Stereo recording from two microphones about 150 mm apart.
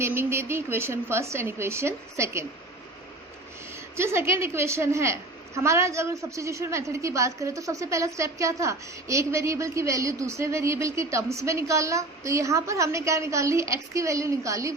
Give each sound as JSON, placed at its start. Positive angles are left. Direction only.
{"t": 0.0, "sound": "a woman's voice", "side_deg": -15}
{"t": 3.9, "sound": "a woman's voice", "side_deg": -15}